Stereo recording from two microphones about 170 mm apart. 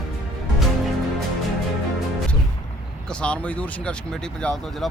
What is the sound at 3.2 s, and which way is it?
Speech, 5° left (ahead or behind).